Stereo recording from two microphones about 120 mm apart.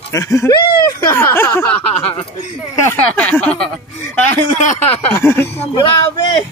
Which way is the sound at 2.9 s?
10° left (ahead or behind).